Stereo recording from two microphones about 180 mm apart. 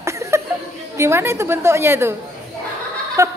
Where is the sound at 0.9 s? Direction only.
15° right (ahead or behind).